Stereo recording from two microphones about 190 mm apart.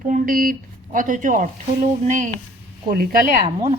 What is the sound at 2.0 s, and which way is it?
Speech, 40° right (ahead or behind).